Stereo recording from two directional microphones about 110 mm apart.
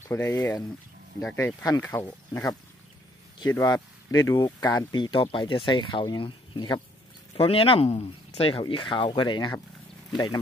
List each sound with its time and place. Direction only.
0.0 s speech: 25° left (ahead or behind)
3.5 s speech: 30° left (ahead or behind)
4.7 s speech: 45° left (ahead or behind)
7.3 s speech: 55° left (ahead or behind); by 9.6 s 40° left (ahead or behind)